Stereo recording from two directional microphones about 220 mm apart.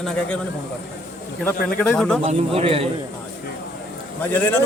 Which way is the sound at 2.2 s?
25° right (ahead or behind).